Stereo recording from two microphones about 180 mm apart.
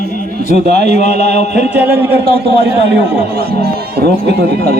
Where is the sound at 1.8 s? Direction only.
10° right (ahead or behind).